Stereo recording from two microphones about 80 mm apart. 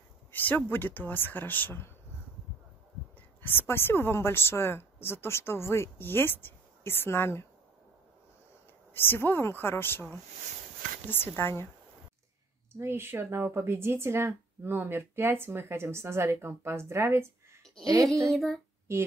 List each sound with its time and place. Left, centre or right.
0.3 s speech: left
3.2 s a woman's voice: left
8.9 s speech: left
12.7 s speech: right
18.0 s speech: centre
18.9 s a woman's voice: right